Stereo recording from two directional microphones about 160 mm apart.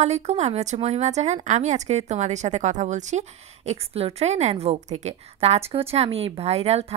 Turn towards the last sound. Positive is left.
turn(degrees=-40)  # may be behind; listen again after turning